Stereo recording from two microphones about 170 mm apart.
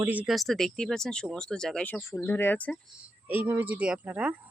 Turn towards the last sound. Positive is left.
turn(degrees=-10)  # may be behind; listen again after turning